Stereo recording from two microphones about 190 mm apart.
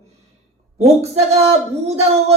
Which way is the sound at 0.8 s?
35° right (ahead or behind).